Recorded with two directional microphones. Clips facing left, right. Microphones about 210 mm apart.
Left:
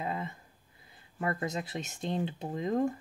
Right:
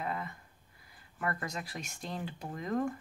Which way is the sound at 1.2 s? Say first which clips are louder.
Left 4 dB; 25° left (ahead or behind).